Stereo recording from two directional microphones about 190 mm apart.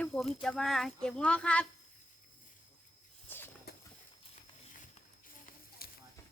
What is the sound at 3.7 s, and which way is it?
Bird, 55° left (ahead or behind).